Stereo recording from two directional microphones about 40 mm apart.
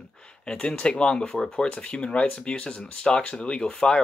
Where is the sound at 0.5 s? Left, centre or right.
Left.